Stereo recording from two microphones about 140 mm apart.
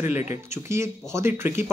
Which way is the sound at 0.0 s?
15° right (ahead or behind).